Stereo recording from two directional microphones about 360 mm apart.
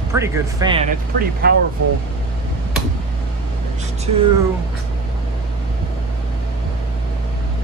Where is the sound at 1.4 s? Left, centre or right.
Right.